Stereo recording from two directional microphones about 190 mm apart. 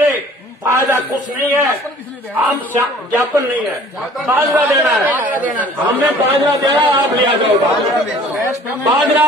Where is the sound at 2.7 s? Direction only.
10° right (ahead or behind).